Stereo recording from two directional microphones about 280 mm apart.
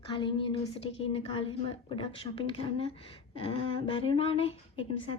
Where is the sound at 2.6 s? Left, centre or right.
Centre.